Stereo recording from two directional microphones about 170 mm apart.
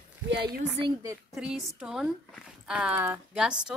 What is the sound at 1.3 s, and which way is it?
A woman's voice, centre (ahead or behind).